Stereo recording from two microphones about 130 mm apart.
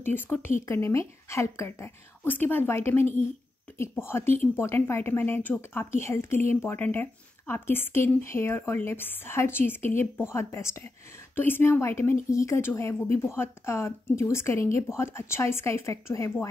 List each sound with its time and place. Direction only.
0.0 s a woman's voice: 15° left (ahead or behind)